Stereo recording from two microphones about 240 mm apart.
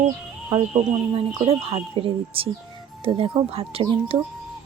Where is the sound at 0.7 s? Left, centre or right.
Right.